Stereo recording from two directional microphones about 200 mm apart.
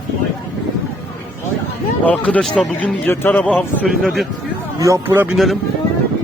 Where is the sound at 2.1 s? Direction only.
5° left (ahead or behind).